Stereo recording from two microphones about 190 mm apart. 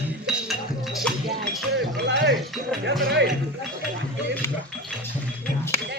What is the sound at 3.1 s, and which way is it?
Music, 65° right (ahead or behind).